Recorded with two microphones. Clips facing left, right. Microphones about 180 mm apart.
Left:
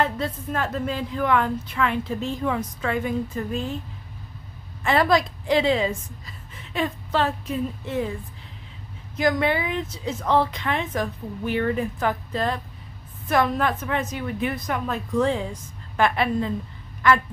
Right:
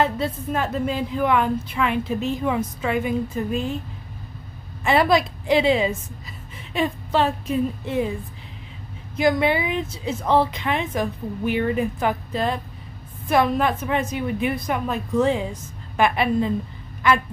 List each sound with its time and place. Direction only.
0.2 s a woman's voice: 10° right (ahead or behind)
4.8 s a woman's voice: 10° right (ahead or behind)
9.1 s a woman's voice: 15° right (ahead or behind)